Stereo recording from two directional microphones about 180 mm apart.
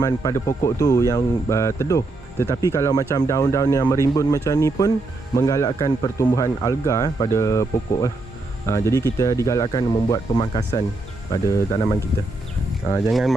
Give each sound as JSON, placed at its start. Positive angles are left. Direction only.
{"t": 0.0, "sound": "speech", "side_deg": 15}
{"t": 13.1, "sound": "speech", "side_deg": 0}